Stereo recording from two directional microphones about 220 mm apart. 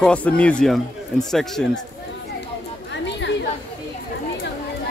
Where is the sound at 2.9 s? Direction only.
55° left (ahead or behind).